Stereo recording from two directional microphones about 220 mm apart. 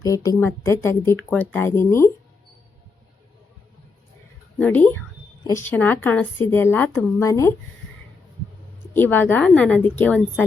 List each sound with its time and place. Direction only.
0.0 s speech: 15° left (ahead or behind)
4.5 s speech: 5° left (ahead or behind)
8.9 s speech: 10° left (ahead or behind)